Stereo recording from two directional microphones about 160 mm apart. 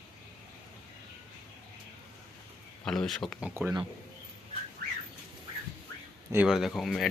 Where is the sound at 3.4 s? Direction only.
10° right (ahead or behind).